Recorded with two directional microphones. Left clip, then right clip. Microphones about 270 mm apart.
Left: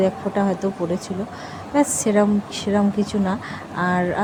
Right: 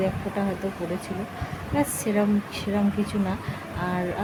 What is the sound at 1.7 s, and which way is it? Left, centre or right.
Speech, centre.